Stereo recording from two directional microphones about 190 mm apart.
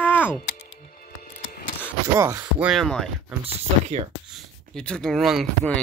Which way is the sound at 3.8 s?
30° right (ahead or behind).